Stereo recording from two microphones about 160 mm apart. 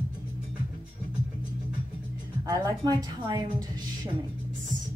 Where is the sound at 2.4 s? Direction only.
25° right (ahead or behind).